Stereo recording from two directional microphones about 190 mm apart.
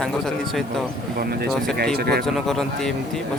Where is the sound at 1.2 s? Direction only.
55° right (ahead or behind).